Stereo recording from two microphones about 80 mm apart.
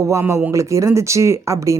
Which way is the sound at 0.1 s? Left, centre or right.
Right.